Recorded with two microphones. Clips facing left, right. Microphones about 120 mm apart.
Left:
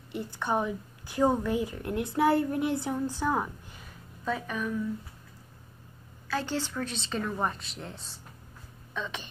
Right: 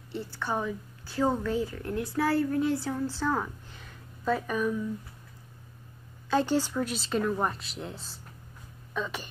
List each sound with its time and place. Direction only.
0.1 s a woman's voice: 15° left (ahead or behind)
4.2 s a woman's voice: 5° right (ahead or behind)
6.2 s a woman's voice: 15° right (ahead or behind)